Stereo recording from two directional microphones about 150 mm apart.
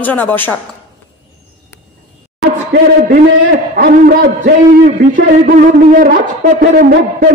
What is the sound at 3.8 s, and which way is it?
A man's voice, 75° right (ahead or behind).